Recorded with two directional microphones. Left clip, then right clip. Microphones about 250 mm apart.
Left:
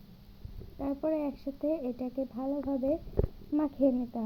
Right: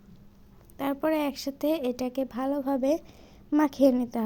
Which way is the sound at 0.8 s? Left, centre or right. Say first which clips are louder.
Right 5 dB; right.